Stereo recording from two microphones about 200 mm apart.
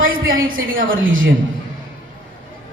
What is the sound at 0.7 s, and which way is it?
Speech, 45° right (ahead or behind).